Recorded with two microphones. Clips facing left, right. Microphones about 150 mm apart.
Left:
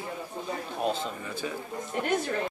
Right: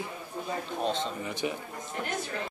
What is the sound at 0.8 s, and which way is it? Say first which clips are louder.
Speech: left 1 dB; 5° left (ahead or behind).